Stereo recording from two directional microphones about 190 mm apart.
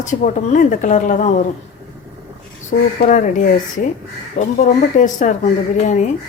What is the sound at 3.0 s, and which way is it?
Speech, 45° left (ahead or behind).